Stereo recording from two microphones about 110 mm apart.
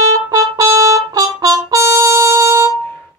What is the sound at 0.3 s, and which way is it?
Trumpet, 30° right (ahead or behind).